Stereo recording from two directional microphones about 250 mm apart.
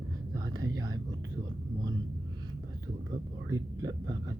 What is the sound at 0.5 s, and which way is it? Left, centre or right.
Speech, centre.